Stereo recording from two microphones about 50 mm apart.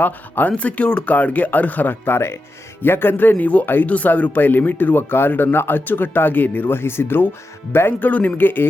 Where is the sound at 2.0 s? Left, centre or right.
Left.